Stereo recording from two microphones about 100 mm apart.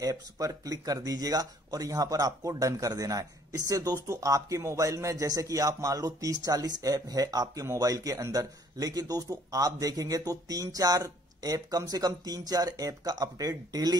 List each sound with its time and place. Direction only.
0.0 s speech: 35° right (ahead or behind)